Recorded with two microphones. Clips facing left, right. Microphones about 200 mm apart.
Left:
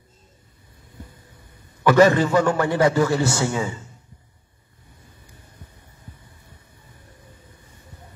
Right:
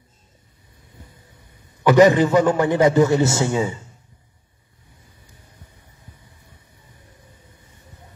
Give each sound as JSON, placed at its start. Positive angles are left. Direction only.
{"t": 1.8, "sound": "a man's voice", "side_deg": -15}